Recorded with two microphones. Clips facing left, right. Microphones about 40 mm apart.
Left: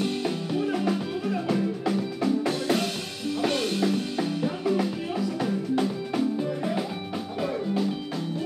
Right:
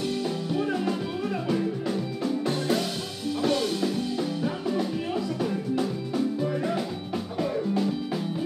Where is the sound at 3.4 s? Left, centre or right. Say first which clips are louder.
Even; left.